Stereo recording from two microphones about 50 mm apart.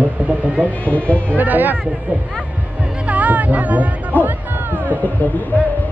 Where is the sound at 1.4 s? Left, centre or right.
Right.